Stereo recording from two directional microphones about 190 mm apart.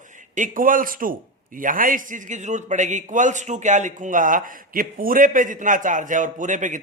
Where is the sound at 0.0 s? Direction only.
40° right (ahead or behind).